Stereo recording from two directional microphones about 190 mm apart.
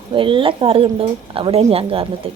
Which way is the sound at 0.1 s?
25° right (ahead or behind).